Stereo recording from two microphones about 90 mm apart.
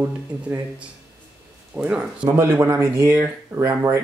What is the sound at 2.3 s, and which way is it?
Speech, 30° right (ahead or behind).